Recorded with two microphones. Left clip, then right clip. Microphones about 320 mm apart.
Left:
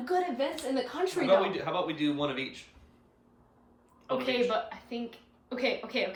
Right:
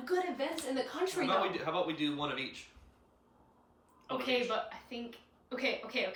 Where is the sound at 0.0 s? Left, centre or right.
Centre.